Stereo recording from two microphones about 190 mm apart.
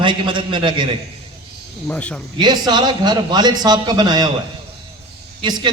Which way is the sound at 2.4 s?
20° right (ahead or behind).